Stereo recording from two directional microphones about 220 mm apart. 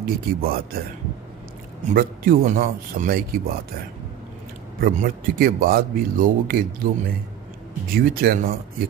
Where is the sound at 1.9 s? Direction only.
40° right (ahead or behind).